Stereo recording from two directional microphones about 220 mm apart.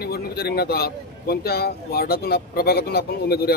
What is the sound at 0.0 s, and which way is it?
A man's voice, 45° left (ahead or behind).